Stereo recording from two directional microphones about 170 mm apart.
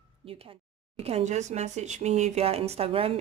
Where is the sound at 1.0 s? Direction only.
40° right (ahead or behind).